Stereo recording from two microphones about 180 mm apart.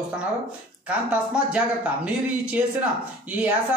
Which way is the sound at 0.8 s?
5° right (ahead or behind).